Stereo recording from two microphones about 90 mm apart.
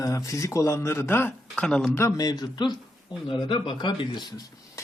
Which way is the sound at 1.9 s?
30° left (ahead or behind).